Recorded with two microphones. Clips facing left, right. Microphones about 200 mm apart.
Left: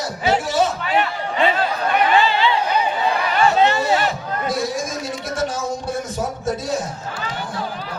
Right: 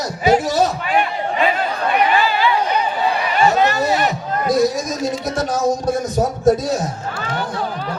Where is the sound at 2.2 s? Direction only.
25° left (ahead or behind).